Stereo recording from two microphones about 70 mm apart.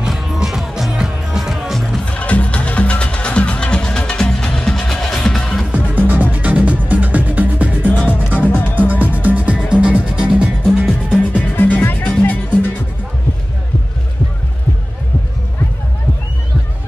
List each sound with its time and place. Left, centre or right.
0.0 s music: centre
2.1 s music: centre
5.7 s music: right
11.3 s music: left